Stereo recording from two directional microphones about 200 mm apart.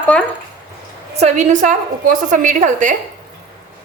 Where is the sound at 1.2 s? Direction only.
35° right (ahead or behind).